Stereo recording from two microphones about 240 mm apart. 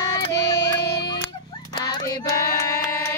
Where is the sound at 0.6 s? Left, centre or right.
Left.